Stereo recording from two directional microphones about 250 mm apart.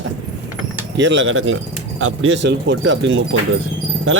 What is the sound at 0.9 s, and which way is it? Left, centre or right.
Speech, right.